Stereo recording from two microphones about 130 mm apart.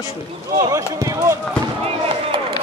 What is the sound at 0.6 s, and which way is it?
Speech, 25° right (ahead or behind).